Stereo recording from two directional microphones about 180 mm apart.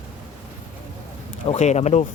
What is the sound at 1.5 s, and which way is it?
Speech, 40° left (ahead or behind).